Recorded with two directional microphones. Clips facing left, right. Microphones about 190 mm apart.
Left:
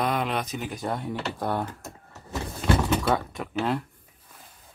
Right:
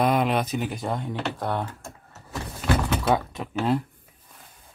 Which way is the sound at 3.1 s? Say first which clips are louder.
Right 2 dB; 15° right (ahead or behind).